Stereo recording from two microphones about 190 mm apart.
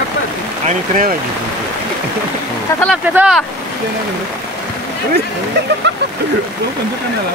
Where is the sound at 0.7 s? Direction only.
45° right (ahead or behind).